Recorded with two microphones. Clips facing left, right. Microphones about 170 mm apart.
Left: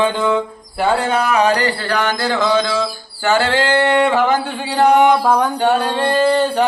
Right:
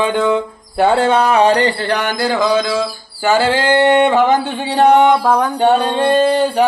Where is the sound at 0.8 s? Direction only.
30° right (ahead or behind).